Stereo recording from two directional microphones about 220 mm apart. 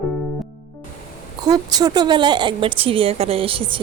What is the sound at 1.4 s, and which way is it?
A woman's voice, 15° right (ahead or behind).